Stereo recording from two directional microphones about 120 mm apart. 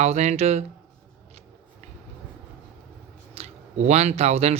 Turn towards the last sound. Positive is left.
turn(degrees=-65)  # may be behind; listen again after turning